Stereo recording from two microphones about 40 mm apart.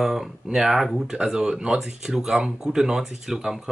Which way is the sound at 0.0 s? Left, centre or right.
Centre.